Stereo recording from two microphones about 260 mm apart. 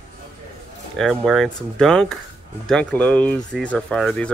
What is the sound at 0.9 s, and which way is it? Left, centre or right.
Speech, centre.